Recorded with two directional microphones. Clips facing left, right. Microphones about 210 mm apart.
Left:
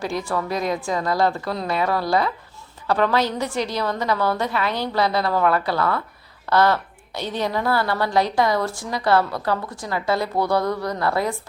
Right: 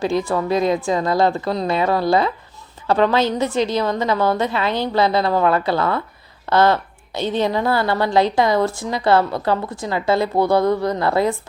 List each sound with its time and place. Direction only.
0.0 s a woman's voice: 25° right (ahead or behind)